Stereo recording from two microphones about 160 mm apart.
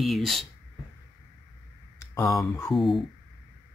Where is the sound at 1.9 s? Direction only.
20° left (ahead or behind).